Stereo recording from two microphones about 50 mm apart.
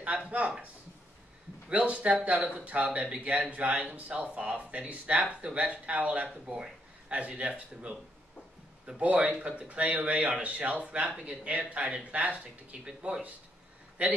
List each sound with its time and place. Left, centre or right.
1.7 s a man's voice: right
10.1 s speech: centre
10.4 s a man's voice: right
12.8 s speech: centre
14.0 s a man's voice: right